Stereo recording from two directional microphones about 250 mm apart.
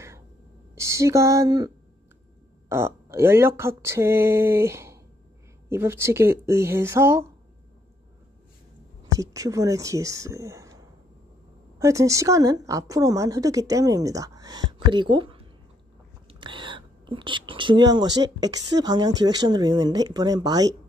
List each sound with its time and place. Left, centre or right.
0.7 s speech: centre
2.7 s speech: centre
9.2 s speech: centre
11.8 s speech: centre